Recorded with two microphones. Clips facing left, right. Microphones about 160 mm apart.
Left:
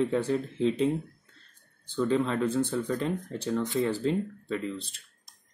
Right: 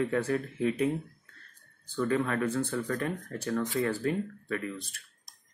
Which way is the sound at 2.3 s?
20° left (ahead or behind).